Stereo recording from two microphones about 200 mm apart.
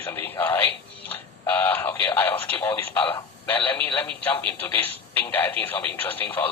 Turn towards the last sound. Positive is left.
turn(degrees=10)  # may be behind; listen again after turning